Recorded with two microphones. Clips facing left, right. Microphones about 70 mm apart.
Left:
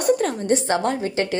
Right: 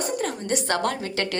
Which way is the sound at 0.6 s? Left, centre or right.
Left.